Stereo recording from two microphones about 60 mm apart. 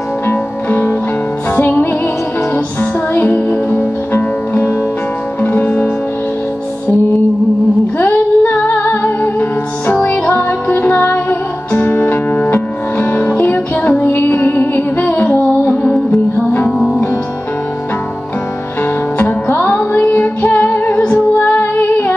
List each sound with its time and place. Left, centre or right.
0.3 s music: left
8.0 s female singing: left
8.7 s music: left
16.7 s music: centre
19.1 s music: left